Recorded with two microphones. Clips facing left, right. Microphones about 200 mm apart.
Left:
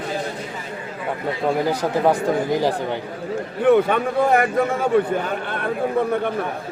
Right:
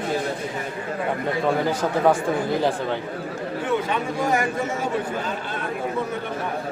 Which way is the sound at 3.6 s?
60° left (ahead or behind).